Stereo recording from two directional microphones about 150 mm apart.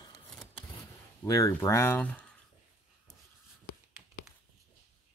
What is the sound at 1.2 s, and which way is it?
Speech, 20° left (ahead or behind).